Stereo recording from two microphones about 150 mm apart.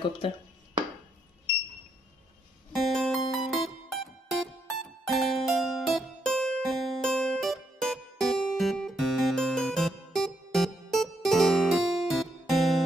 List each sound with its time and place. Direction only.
0.2 s speech: 35° left (ahead or behind)
2.7 s music: centre (ahead or behind)